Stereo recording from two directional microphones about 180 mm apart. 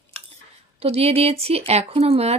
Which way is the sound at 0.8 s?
35° right (ahead or behind).